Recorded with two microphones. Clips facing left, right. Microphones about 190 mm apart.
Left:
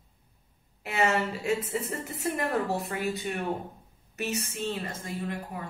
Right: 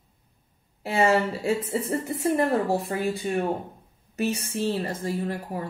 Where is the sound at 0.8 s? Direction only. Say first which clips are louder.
Right 5 dB; 30° right (ahead or behind).